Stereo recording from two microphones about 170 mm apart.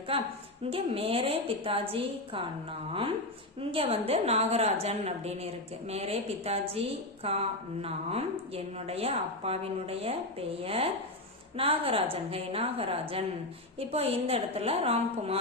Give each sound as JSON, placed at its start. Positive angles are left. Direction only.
{"t": 0.1, "sound": "a woman's voice", "side_deg": -35}
{"t": 3.6, "sound": "a woman's voice", "side_deg": -35}